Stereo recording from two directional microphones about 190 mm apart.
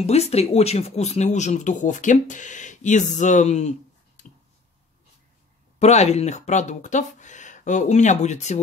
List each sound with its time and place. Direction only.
0.0 s speech: 35° left (ahead or behind)
4.2 s a sound: 40° left (ahead or behind)
5.8 s speech: 35° left (ahead or behind)